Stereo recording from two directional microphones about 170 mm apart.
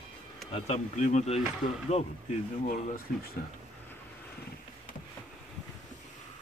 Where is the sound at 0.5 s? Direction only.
35° left (ahead or behind).